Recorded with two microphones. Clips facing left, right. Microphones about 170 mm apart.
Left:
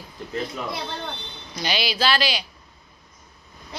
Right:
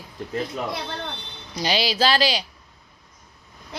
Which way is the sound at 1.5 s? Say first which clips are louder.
Right 3 dB; 35° right (ahead or behind).